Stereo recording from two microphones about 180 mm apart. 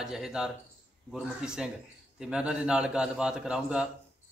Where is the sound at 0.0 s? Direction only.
5° right (ahead or behind).